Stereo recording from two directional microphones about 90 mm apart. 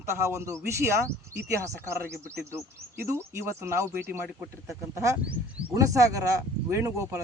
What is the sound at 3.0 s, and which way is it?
Speech, 30° right (ahead or behind).